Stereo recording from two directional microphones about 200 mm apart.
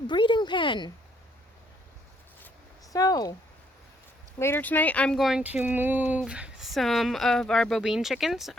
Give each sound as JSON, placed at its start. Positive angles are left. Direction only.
{"t": 0.1, "sound": "speech", "side_deg": 25}
{"t": 2.9, "sound": "speech", "side_deg": 15}
{"t": 4.4, "sound": "speech", "side_deg": 10}